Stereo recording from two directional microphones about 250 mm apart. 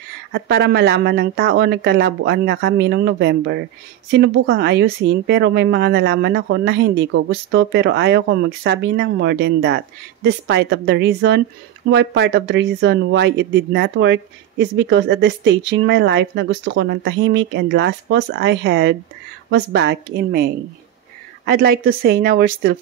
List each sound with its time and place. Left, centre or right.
0.3 s speech: right